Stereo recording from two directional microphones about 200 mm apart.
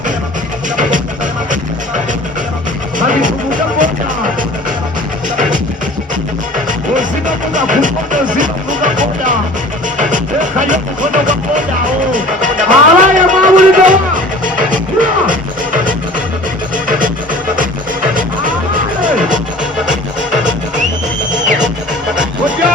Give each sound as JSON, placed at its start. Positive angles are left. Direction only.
{"t": 3.1, "sound": "music", "side_deg": -40}
{"t": 6.7, "sound": "music", "side_deg": -40}
{"t": 18.1, "sound": "music", "side_deg": -40}